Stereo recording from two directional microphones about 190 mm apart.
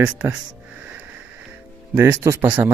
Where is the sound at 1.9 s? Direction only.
15° right (ahead or behind).